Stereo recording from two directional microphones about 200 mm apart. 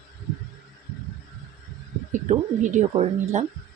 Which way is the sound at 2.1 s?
40° right (ahead or behind).